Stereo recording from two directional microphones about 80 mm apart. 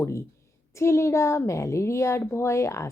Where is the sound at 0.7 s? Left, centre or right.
Left.